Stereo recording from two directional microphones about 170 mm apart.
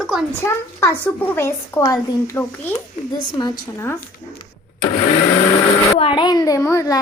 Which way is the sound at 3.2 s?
25° left (ahead or behind).